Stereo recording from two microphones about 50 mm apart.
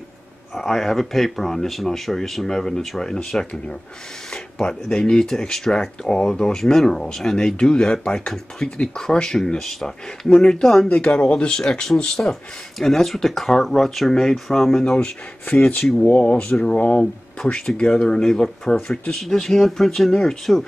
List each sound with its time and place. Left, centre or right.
0.6 s speech: centre
3.3 s speech: left
10.9 s speech: left; by 18.8 s centre
18.8 s speech: left; by 20.6 s centre